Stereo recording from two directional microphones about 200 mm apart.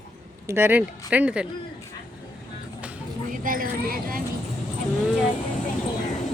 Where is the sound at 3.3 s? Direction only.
45° right (ahead or behind).